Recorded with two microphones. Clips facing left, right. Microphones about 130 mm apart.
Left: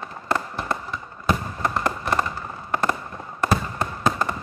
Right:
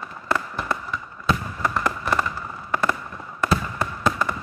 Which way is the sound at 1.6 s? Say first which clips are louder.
Even; 35° left (ahead or behind).